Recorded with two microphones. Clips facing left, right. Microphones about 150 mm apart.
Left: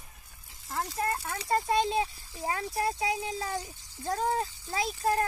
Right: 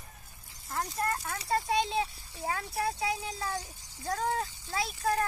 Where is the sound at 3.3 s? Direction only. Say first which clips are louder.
Left 2 dB; 20° left (ahead or behind).